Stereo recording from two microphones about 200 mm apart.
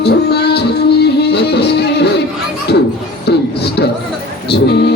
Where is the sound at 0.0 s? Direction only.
55° left (ahead or behind).